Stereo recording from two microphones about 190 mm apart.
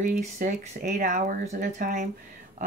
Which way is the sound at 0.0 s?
45° right (ahead or behind).